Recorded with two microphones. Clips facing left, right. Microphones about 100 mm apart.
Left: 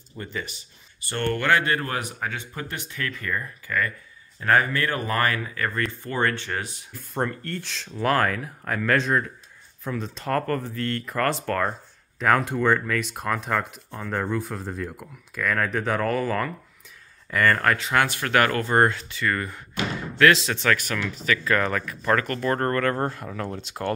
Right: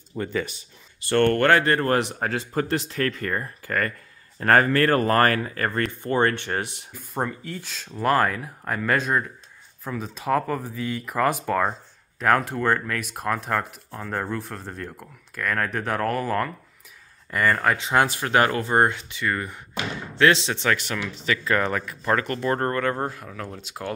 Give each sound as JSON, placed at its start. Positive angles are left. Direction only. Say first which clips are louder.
{"t": 1.0, "sound": "speech", "louder": "right 7 dB", "side_deg": -65}
{"t": 1.5, "sound": "speech", "louder": "right 4 dB", "side_deg": -40}
{"t": 4.4, "sound": "speech", "louder": "right 3 dB", "side_deg": -50}
{"t": 6.0, "sound": "speech", "louder": "right 5 dB", "side_deg": -35}
{"t": 7.0, "sound": "speech", "louder": "left 1 dB", "side_deg": -5}
{"t": 17.7, "sound": "speech", "louder": "right 2 dB", "side_deg": -20}